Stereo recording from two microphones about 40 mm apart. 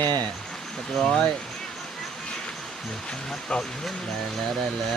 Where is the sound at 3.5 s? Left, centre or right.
Left.